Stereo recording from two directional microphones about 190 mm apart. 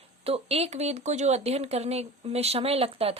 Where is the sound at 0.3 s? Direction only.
30° right (ahead or behind).